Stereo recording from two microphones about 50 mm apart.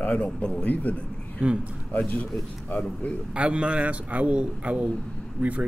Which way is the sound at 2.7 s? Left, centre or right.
Left.